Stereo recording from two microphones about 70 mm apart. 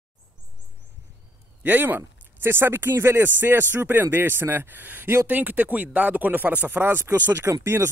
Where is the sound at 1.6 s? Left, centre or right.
Right.